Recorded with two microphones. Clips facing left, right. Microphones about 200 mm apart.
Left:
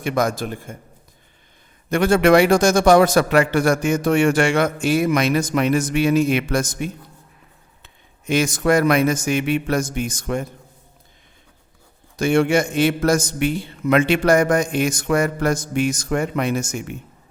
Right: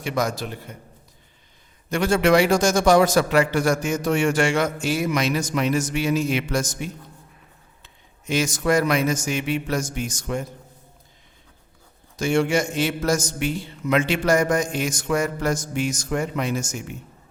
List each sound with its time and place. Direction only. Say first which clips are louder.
0.0 s a man's voice: left 4 dB; 55° left (ahead or behind)
1.9 s a man's voice: left 4 dB; 55° left (ahead or behind)
8.3 s a man's voice: left 3 dB; 55° left (ahead or behind)
12.1 s a man's voice: left 4 dB; 55° left (ahead or behind)